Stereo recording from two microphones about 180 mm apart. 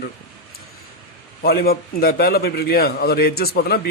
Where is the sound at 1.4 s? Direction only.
55° left (ahead or behind).